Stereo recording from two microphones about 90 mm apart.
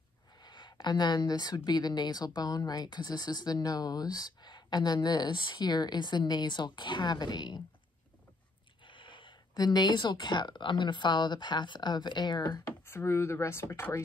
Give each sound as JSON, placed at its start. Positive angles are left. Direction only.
{"t": 0.4, "sound": "speech", "side_deg": 55}
{"t": 8.8, "sound": "speech", "side_deg": 65}
{"t": 12.8, "sound": "speech", "side_deg": 30}